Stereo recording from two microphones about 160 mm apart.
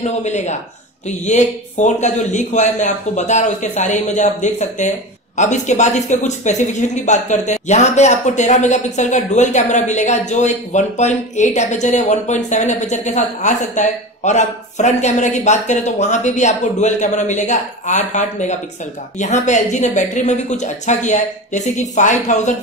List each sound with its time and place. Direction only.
0.0 s speech: 45° left (ahead or behind)